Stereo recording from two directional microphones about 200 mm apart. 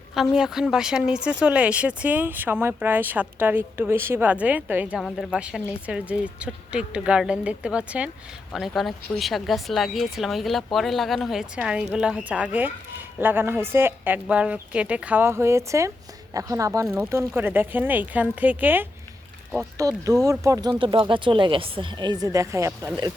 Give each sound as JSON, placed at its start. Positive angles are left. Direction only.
{"t": 0.1, "sound": "speech", "side_deg": 0}